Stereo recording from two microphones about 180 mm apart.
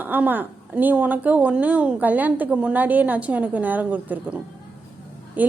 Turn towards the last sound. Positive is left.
turn(degrees=-10)  # may be behind; listen again after turning